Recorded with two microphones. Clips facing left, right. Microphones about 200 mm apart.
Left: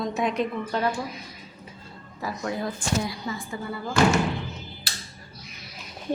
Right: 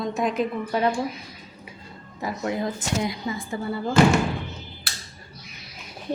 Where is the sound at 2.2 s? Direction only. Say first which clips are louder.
Right 3 dB; 20° right (ahead or behind).